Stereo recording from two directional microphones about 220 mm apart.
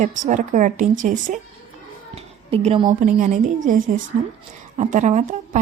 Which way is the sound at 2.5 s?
25° right (ahead or behind).